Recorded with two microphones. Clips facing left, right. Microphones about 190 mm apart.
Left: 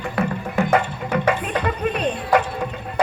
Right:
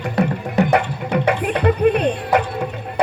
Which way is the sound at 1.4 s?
60° right (ahead or behind).